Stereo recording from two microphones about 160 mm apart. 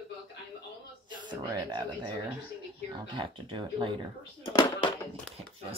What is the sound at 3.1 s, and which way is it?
Speech, 30° right (ahead or behind).